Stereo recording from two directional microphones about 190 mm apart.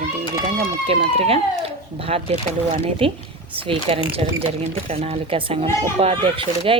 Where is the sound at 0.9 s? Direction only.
30° right (ahead or behind).